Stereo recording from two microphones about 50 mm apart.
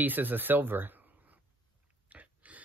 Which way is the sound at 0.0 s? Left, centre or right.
Right.